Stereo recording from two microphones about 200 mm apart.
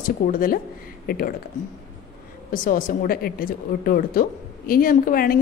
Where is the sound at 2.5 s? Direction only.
40° left (ahead or behind).